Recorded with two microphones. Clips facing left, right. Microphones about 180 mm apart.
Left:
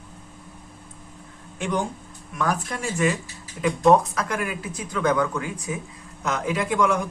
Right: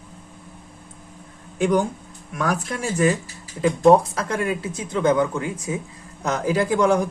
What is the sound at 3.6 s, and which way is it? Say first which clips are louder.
A man's voice: right 3 dB; 30° right (ahead or behind).